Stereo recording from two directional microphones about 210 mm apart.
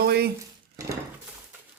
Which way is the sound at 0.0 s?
50° right (ahead or behind).